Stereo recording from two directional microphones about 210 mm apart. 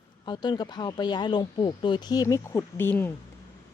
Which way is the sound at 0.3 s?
20° left (ahead or behind).